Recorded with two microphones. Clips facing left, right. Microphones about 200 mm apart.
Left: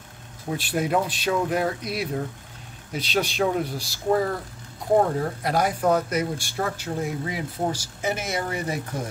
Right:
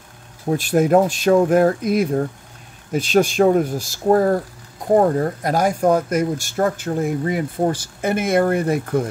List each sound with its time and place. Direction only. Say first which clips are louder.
0.5 s speech: right 9 dB; 45° right (ahead or behind)